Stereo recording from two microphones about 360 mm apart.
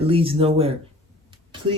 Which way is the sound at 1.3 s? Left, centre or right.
Centre.